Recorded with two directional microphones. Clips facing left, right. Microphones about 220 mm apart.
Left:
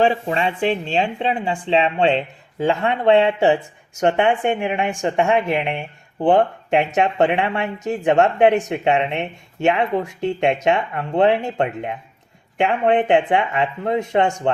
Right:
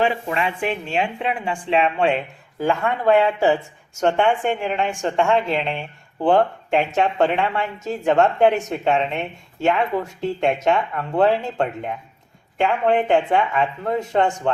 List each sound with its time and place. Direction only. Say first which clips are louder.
0.0 s speech: left 3 dB; 30° left (ahead or behind)